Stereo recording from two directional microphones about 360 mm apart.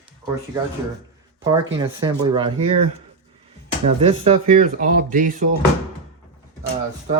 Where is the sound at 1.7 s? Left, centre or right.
Centre.